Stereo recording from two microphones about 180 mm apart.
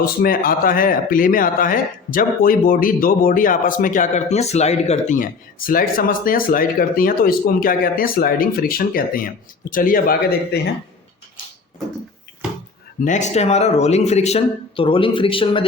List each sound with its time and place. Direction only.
0.0 s a man's voice: 55° left (ahead or behind)
13.1 s speech: 40° left (ahead or behind)